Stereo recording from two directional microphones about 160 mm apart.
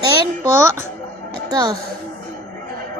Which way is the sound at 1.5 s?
25° right (ahead or behind).